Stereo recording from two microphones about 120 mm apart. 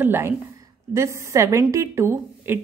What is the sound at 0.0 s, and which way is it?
A woman's voice, 20° right (ahead or behind).